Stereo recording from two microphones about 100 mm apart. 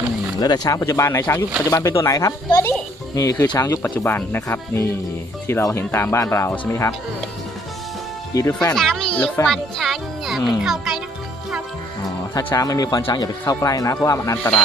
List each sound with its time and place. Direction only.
0.3 s speech: 40° left (ahead or behind)
3.4 s speech: 40° left (ahead or behind)
4.0 s speech: 20° left (ahead or behind)
8.3 s speech: 35° left (ahead or behind)
8.7 s a child's voice: 5° left (ahead or behind)
9.5 s a child's voice: centre (ahead or behind)
12.5 s speech: 35° left (ahead or behind)